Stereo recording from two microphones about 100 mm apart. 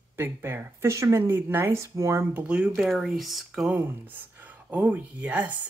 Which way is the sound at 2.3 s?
10° right (ahead or behind).